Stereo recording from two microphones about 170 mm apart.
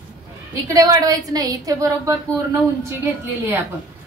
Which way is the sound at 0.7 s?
20° right (ahead or behind).